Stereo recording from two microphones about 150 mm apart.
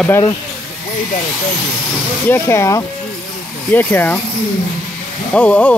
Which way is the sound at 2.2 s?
15° left (ahead or behind).